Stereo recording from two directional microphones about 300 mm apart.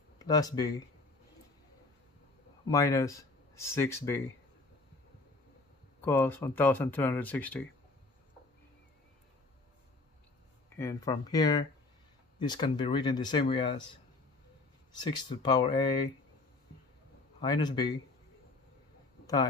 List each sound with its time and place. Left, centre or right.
0.3 s speech: centre
2.7 s speech: centre
5.9 s speech: centre
10.8 s speech: centre
15.0 s speech: centre
17.4 s speech: centre